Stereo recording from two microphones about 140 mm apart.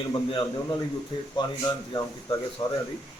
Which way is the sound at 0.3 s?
35° left (ahead or behind).